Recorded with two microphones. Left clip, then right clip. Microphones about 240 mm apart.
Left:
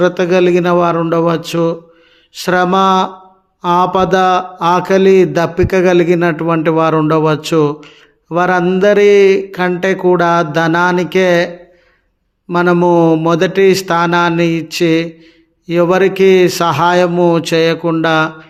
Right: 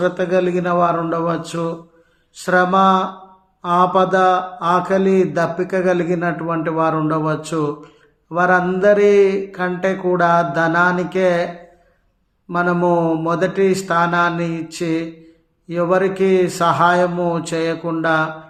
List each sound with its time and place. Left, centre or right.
0.0 s speech: left
12.5 s speech: left